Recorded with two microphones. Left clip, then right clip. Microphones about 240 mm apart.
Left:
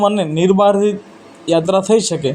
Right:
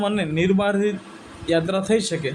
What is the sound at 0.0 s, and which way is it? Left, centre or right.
A man's voice, centre.